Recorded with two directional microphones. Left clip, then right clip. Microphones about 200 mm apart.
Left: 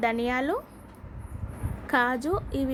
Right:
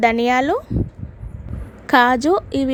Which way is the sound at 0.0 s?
40° right (ahead or behind).